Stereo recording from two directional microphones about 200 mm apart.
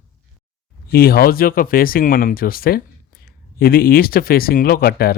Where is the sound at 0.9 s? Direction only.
50° left (ahead or behind).